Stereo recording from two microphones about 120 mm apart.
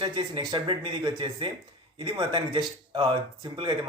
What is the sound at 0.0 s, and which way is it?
Speech, 40° right (ahead or behind).